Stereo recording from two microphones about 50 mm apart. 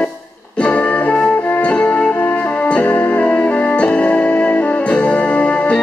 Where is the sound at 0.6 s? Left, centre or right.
Left.